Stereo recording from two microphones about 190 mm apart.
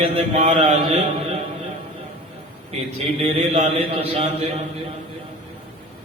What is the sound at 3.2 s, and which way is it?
Mantra, 30° right (ahead or behind).